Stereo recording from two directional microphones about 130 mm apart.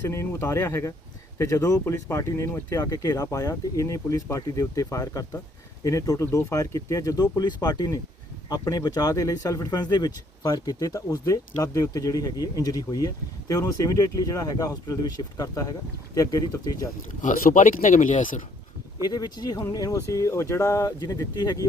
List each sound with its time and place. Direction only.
0.0 s speech: 20° left (ahead or behind)
17.2 s speech: 80° left
19.0 s speech: 30° left (ahead or behind)